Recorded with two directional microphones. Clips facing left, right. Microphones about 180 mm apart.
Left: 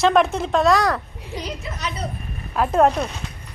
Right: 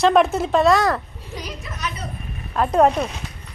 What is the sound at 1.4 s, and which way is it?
Speech, 30° left (ahead or behind).